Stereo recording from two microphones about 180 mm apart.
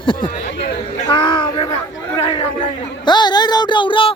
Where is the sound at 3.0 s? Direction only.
25° left (ahead or behind).